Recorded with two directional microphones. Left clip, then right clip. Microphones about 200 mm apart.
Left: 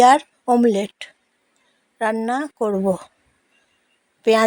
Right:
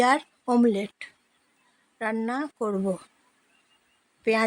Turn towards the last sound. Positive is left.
turn(degrees=15)  # may be behind; listen again after turning